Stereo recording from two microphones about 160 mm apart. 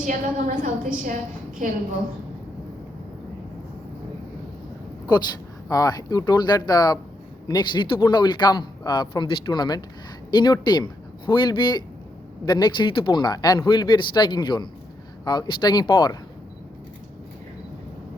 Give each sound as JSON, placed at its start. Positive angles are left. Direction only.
{"t": 0.0, "sound": "a woman's voice", "side_deg": -50}
{"t": 5.6, "sound": "speech", "side_deg": 20}